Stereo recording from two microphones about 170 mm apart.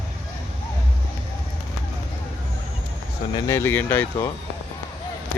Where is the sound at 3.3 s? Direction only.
15° left (ahead or behind).